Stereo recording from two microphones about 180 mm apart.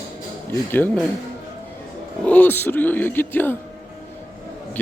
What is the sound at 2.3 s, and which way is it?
Speech, 10° left (ahead or behind).